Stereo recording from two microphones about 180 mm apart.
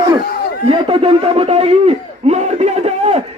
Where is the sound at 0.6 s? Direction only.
30° right (ahead or behind).